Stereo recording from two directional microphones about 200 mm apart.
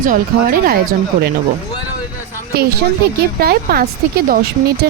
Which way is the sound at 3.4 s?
50° right (ahead or behind).